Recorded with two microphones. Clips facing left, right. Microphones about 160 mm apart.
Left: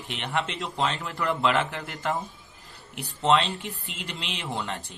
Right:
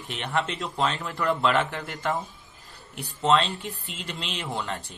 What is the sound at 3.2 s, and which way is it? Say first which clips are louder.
Speech: even; 20° left (ahead or behind).